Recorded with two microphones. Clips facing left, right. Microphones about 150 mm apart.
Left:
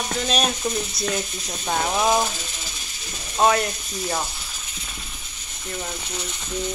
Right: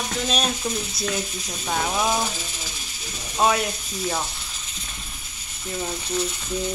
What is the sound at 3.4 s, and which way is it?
Speech, centre (ahead or behind).